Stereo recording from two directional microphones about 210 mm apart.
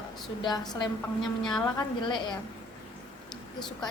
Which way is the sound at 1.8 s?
20° left (ahead or behind).